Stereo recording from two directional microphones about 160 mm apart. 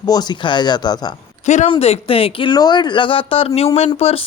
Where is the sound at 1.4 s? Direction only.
45° left (ahead or behind).